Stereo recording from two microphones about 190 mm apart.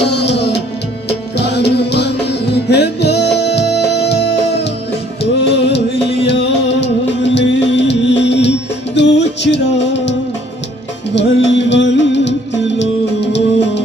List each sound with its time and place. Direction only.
0.0 s music: 65° left (ahead or behind)